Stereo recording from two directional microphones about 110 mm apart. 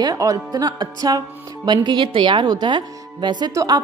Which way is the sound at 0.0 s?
30° right (ahead or behind).